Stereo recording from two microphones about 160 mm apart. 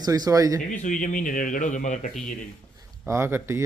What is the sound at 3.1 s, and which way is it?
Speech, 15° right (ahead or behind).